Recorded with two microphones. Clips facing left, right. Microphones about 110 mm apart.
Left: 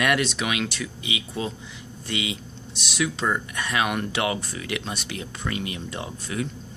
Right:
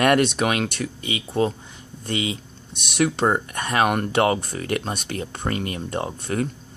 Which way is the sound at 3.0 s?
50° right (ahead or behind).